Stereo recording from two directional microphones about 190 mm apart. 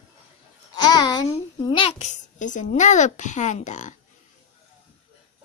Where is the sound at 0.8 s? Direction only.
20° left (ahead or behind); by 3.9 s 40° left (ahead or behind).